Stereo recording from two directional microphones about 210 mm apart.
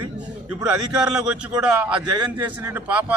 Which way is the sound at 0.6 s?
5° right (ahead or behind).